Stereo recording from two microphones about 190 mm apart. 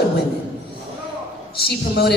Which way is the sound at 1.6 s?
55° left (ahead or behind).